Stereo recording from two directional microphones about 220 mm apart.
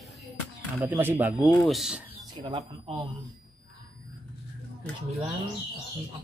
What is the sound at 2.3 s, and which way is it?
Speech, 20° right (ahead or behind).